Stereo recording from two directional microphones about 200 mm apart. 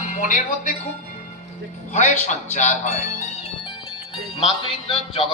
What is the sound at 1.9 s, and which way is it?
A man's voice, 35° left (ahead or behind).